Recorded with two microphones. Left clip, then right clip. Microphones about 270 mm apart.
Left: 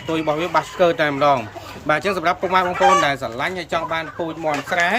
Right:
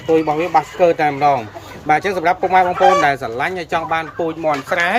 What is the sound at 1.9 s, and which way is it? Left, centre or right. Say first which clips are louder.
Speech: right 4 dB; left.